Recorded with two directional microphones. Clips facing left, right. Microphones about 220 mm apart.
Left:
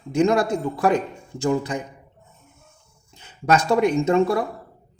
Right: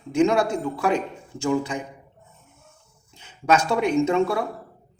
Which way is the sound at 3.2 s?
40° left (ahead or behind).